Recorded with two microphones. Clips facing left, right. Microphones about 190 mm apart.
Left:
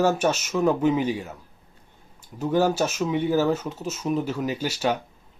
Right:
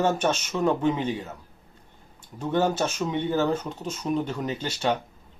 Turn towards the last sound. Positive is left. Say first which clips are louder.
# left 1 dB
turn(degrees=5)  # may be behind; listen again after turning